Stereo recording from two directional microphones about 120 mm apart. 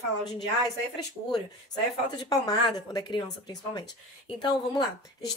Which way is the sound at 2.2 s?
35° left (ahead or behind).